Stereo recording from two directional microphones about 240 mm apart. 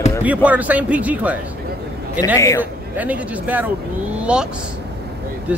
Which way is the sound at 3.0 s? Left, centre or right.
Centre.